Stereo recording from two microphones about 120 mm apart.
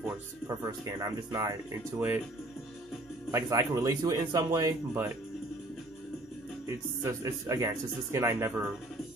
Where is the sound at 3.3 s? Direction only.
25° right (ahead or behind).